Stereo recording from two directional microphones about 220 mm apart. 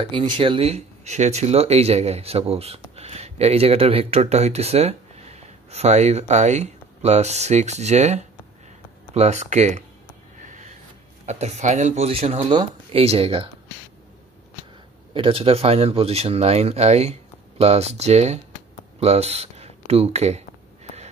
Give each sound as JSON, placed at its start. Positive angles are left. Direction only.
{"t": 0.0, "sound": "speech", "side_deg": -20}
{"t": 10.4, "sound": "a sound", "side_deg": -35}
{"t": 11.2, "sound": "speech", "side_deg": -30}
{"t": 15.1, "sound": "speech", "side_deg": -25}